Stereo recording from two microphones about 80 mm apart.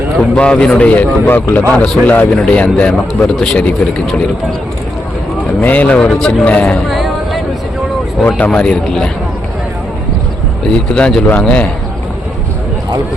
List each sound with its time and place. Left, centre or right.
0.2 s a man's voice: centre
5.5 s speech: centre
6.1 s a man's voice: centre
6.7 s a sound: centre
8.5 s a man's voice: centre
10.7 s a man's voice: centre